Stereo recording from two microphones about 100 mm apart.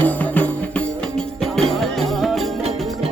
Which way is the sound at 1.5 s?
Centre (ahead or behind).